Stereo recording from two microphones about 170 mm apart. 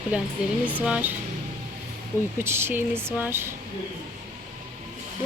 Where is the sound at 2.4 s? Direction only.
15° right (ahead or behind).